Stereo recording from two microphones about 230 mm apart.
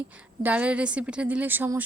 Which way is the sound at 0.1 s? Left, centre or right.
Centre.